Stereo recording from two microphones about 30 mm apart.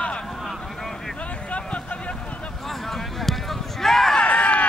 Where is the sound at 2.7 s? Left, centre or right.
Centre.